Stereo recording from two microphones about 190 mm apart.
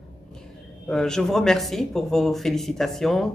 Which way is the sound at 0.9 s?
5° left (ahead or behind).